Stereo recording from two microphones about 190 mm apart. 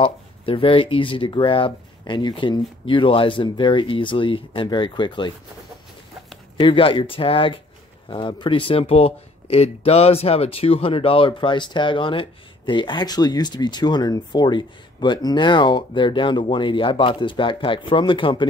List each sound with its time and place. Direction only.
0.0 s speech: 30° left (ahead or behind)
6.5 s speech: 25° left (ahead or behind)